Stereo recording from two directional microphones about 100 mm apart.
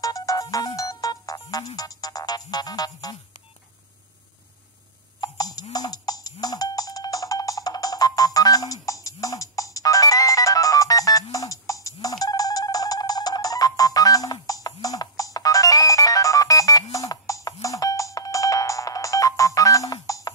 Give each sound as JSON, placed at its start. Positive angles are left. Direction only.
{"t": 0.0, "sound": "music", "side_deg": 35}
{"t": 5.2, "sound": "music", "side_deg": 40}
{"t": 11.3, "sound": "ringtone", "side_deg": 35}